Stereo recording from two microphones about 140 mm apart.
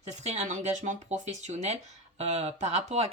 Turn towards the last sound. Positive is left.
turn(degrees=-50)  # may be behind; listen again after turning